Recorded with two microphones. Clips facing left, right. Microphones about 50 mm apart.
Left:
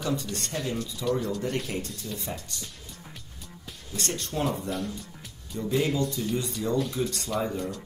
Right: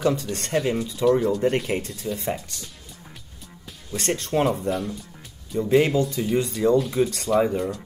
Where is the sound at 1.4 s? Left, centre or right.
Centre.